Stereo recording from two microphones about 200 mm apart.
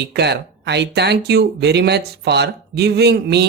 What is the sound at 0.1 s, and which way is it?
Speech, 55° right (ahead or behind).